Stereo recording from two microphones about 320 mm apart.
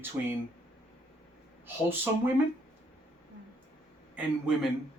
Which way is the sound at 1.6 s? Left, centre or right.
Centre.